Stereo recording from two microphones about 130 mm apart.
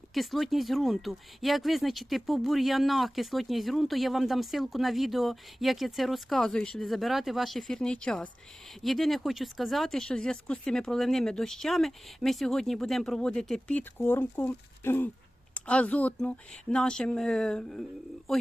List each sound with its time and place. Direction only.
0.1 s speech: centre (ahead or behind)
14.0 s speech: 15° left (ahead or behind); by 18.4 s centre (ahead or behind)